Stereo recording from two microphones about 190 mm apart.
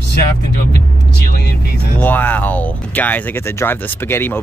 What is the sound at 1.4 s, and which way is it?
Speech, 55° left (ahead or behind).